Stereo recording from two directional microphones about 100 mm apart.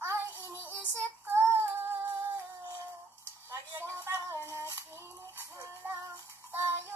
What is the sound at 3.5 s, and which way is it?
Music, 20° right (ahead or behind).